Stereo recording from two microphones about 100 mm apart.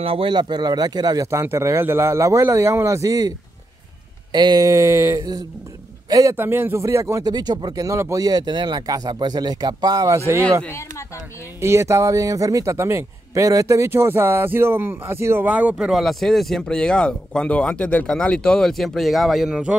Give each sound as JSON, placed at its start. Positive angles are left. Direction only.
{"t": 0.0, "sound": "a man's voice", "side_deg": -65}
{"t": 6.3, "sound": "a man's voice", "side_deg": -20}
{"t": 7.2, "sound": "speech", "side_deg": -40}
{"t": 11.6, "sound": "a man's voice", "side_deg": -30}
{"t": 15.9, "sound": "speech", "side_deg": 0}